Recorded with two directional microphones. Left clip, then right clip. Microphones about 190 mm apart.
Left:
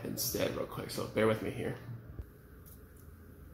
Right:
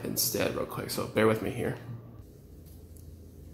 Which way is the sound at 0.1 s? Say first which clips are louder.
Right 5 dB; 5° right (ahead or behind).